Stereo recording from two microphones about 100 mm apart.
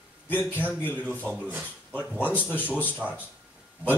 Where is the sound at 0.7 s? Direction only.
20° left (ahead or behind).